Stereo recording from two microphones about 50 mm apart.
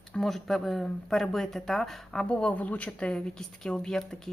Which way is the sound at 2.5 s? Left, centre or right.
Left.